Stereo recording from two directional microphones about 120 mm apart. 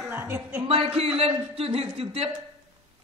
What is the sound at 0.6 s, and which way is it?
A woman's voice, 55° right (ahead or behind).